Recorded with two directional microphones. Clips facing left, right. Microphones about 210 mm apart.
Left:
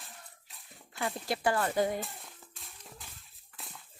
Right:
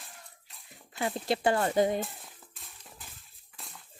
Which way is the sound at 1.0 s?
20° right (ahead or behind).